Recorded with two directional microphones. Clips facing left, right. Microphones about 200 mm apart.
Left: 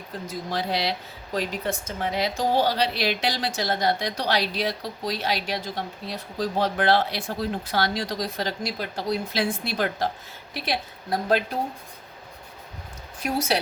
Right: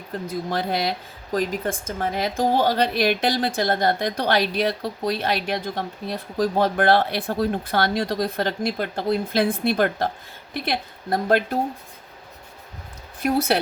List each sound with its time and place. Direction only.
0.3 s speech: 50° right (ahead or behind)